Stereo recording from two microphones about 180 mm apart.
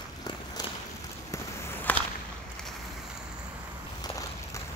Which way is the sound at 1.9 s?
10° left (ahead or behind).